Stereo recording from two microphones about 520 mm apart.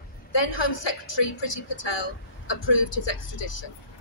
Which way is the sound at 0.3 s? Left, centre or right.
Left.